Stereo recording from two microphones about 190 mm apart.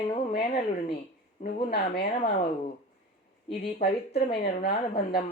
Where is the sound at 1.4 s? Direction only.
60° left (ahead or behind).